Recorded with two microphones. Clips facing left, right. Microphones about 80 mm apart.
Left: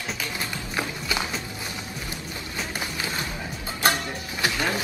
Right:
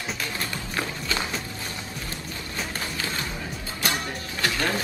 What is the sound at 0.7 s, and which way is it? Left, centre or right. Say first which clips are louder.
Run: left 1 dB; centre.